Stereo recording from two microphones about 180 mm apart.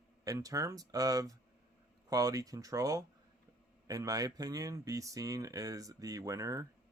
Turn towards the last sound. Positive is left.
turn(degrees=-20)  # may be behind; listen again after turning